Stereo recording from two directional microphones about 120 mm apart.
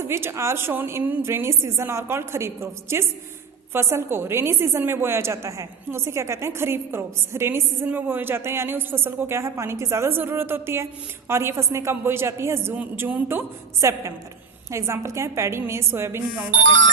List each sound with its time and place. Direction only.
0.0 s a woman's voice: 20° right (ahead or behind)